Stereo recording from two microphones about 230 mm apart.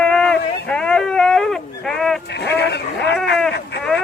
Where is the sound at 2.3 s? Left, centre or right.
Left.